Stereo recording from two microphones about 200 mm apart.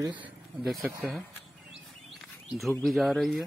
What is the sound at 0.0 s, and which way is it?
Speech, 10° right (ahead or behind).